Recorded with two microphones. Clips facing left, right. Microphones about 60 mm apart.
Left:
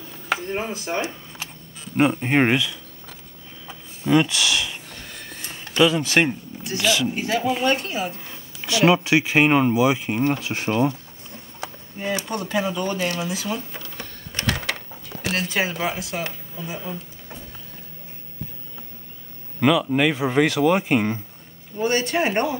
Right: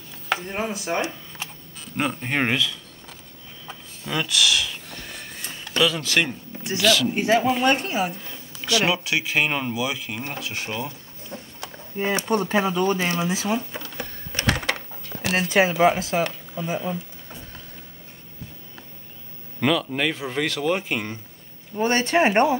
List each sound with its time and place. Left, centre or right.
0.5 s speech: centre
2.0 s speech: centre
4.0 s speech: left
5.8 s speech: left
7.2 s speech: right
8.6 s speech: left
12.0 s speech: right
13.7 s a sound: centre
14.3 s sewing machine: centre
15.3 s speech: right
15.9 s speech: right
16.8 s a sound: centre
19.6 s speech: centre
21.7 s speech: right